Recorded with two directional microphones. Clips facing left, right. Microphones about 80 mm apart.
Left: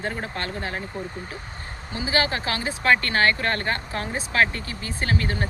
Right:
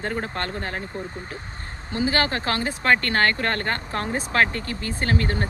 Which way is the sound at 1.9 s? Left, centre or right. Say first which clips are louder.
Right 2 dB; right.